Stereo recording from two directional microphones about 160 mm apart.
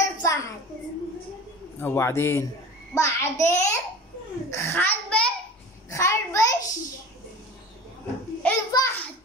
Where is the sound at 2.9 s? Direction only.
15° left (ahead or behind).